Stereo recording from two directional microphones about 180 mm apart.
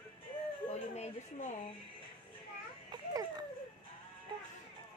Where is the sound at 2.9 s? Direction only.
25° right (ahead or behind).